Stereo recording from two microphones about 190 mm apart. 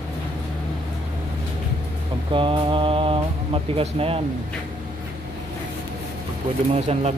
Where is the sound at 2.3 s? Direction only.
25° right (ahead or behind).